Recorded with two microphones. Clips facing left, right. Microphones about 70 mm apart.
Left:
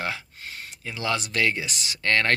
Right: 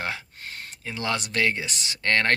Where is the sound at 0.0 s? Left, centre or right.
Right.